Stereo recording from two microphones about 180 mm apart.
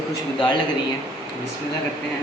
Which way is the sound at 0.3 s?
25° left (ahead or behind).